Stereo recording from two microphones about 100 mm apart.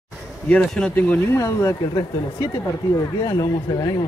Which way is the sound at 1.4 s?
30° left (ahead or behind).